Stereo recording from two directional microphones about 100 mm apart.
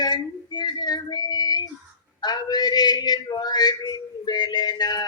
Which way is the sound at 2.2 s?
45° left (ahead or behind).